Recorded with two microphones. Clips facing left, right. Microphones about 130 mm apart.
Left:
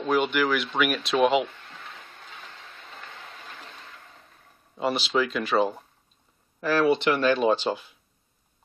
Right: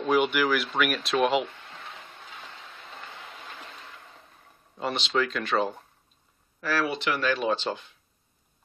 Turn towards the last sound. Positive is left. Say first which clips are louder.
# left 4 dB
turn(degrees=10)  # may be behind; listen again after turning